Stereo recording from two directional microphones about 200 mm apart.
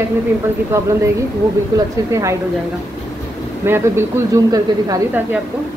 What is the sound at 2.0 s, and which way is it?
Speech, 15° right (ahead or behind).